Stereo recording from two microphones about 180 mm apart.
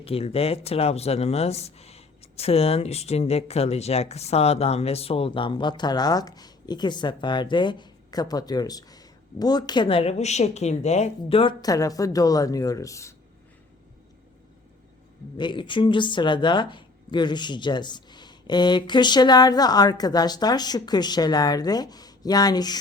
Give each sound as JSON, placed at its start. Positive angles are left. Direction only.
{"t": 0.0, "sound": "speech", "side_deg": 35}
{"t": 15.4, "sound": "speech", "side_deg": 25}